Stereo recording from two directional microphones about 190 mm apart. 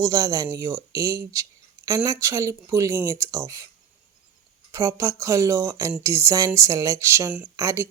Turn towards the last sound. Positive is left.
turn(degrees=-15)  # may be behind; listen again after turning